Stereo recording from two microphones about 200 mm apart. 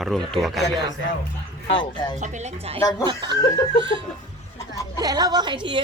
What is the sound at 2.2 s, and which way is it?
Speech, 35° right (ahead or behind).